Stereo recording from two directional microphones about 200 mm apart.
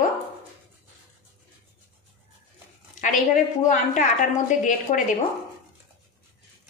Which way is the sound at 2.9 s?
40° left (ahead or behind).